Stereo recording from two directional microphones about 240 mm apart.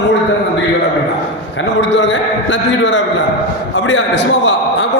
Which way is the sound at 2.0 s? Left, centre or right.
Left.